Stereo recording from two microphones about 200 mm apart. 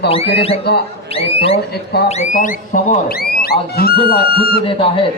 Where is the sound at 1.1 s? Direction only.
30° left (ahead or behind).